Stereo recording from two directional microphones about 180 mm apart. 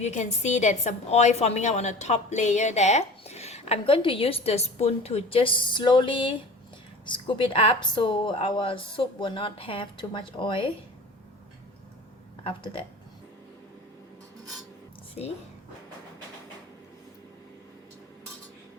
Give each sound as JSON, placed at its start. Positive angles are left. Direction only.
{"t": 0.0, "sound": "a woman's voice", "side_deg": 40}
{"t": 12.4, "sound": "speech", "side_deg": 30}